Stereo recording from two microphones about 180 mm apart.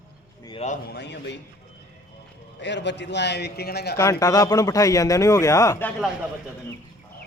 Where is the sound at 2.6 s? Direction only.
75° left (ahead or behind).